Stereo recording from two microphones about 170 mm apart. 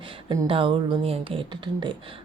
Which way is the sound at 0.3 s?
30° right (ahead or behind).